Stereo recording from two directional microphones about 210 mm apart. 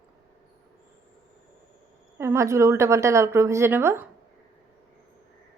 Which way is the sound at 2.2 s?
15° right (ahead or behind).